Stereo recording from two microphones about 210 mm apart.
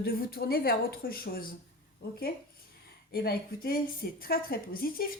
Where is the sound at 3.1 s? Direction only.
45° left (ahead or behind).